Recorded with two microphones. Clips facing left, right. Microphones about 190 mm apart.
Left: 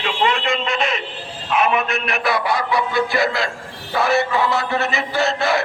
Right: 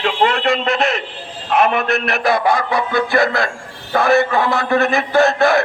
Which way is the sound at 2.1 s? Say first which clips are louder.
Right 5 dB; 45° right (ahead or behind).